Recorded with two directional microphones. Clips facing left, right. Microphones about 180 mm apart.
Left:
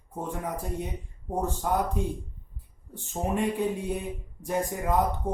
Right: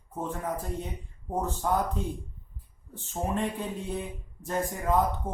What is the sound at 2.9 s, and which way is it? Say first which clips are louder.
A man's voice: left 2 dB; 10° left (ahead or behind).